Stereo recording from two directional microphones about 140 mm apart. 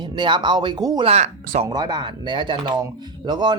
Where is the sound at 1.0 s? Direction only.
50° right (ahead or behind).